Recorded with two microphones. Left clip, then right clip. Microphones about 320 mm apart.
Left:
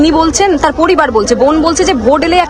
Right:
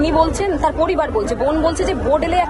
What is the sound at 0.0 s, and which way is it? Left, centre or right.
Speech, left.